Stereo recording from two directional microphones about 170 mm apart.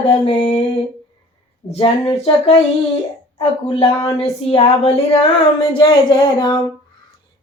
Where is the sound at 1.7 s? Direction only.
35° left (ahead or behind).